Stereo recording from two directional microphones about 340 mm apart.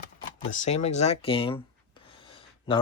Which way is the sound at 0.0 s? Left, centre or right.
Left.